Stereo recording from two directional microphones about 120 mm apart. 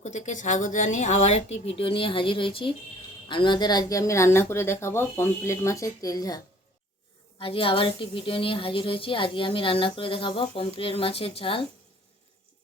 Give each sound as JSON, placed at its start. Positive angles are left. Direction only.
{"t": 0.0, "sound": "speech", "side_deg": 75}
{"t": 7.3, "sound": "a woman's voice", "side_deg": 50}